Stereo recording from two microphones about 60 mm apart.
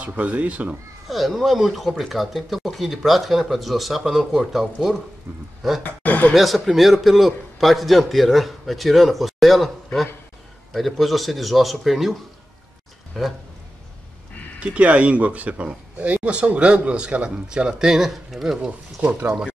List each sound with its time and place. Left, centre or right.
0.0 s speech: right
1.0 s speech: centre
5.9 s a sound: left
6.3 s speech: centre
10.7 s speech: centre
14.6 s speech: right